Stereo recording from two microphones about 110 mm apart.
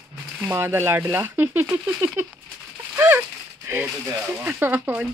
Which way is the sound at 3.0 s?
20° right (ahead or behind).